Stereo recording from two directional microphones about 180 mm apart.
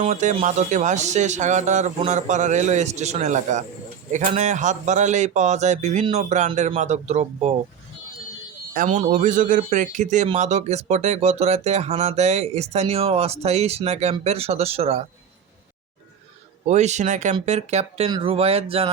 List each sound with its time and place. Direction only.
0.0 s speech: 40° right (ahead or behind)
8.7 s speech: 45° right (ahead or behind)
16.6 s speech: 40° right (ahead or behind)